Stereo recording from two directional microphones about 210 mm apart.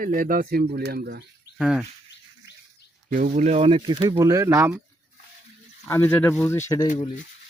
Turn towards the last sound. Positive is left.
turn(degrees=15)  # may be behind; listen again after turning